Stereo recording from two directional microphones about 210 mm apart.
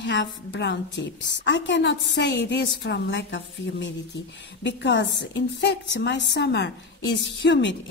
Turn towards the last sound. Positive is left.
turn(degrees=60)  # may be behind; listen again after turning